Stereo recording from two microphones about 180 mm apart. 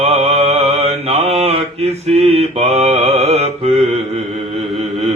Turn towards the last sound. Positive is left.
turn(degrees=-35)  # may be behind; listen again after turning